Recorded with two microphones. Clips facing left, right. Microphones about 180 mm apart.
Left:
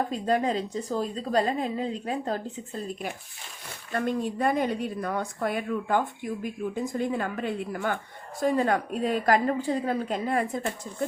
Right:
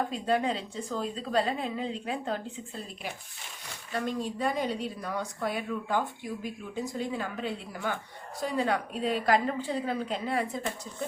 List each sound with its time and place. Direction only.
0.1 s a woman's voice: 40° left (ahead or behind)
3.9 s a woman's voice: 55° left (ahead or behind)